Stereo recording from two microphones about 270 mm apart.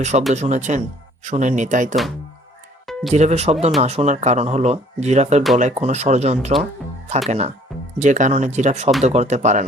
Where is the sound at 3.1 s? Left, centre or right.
Right.